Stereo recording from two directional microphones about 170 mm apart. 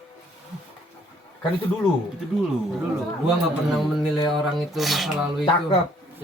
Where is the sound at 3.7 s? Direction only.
Centre (ahead or behind).